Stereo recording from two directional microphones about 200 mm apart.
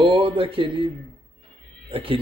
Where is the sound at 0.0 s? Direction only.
25° right (ahead or behind).